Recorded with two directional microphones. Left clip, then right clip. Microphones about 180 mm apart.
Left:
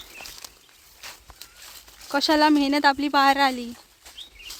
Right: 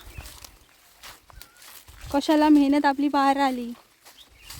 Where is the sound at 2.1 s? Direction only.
15° right (ahead or behind).